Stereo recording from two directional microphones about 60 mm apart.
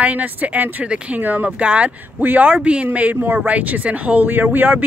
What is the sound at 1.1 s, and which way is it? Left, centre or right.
Speech, right.